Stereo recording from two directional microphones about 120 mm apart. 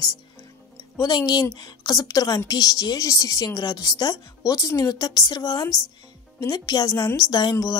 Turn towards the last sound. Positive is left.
turn(degrees=35)  # may be behind; listen again after turning